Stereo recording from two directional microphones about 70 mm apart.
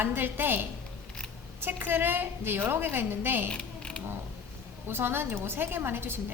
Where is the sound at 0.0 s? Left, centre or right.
Right.